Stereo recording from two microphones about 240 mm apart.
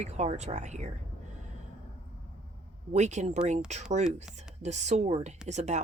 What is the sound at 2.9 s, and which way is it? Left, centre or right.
Speech, right.